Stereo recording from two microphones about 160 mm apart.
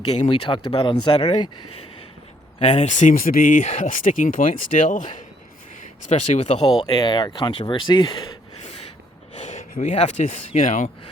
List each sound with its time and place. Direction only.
0.1 s speech: 40° left (ahead or behind)
2.6 s speech: 40° left (ahead or behind)
6.8 s speech: 25° left (ahead or behind)
9.4 s speech: 50° left (ahead or behind)